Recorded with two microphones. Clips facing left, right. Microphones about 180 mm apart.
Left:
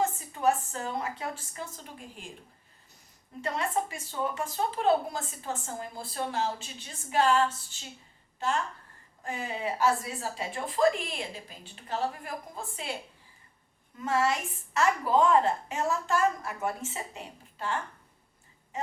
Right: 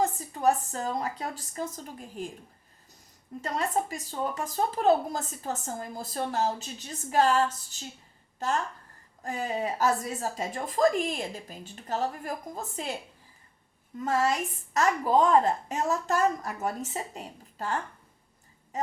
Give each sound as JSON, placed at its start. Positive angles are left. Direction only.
{"t": 0.0, "sound": "a woman's voice", "side_deg": -35}
{"t": 3.4, "sound": "a woman's voice", "side_deg": -40}
{"t": 14.0, "sound": "a woman's voice", "side_deg": -40}